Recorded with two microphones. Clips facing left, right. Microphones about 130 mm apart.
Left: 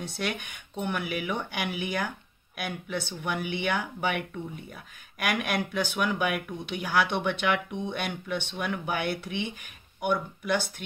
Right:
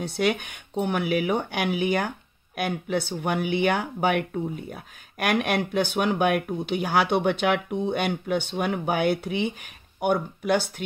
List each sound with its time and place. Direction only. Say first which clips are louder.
0.2 s speech: right 9 dB; 50° right (ahead or behind)